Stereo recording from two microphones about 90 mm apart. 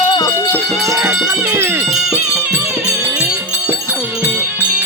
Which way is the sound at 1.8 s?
5° right (ahead or behind).